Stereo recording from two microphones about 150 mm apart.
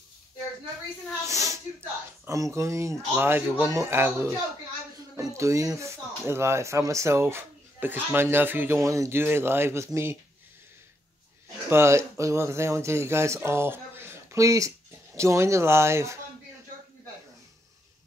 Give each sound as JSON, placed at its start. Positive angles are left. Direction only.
{"t": 1.2, "sound": "speech", "side_deg": -20}
{"t": 11.7, "sound": "speech", "side_deg": -20}